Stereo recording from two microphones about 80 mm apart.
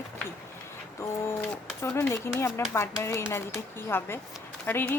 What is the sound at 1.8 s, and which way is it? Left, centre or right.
Speech, left.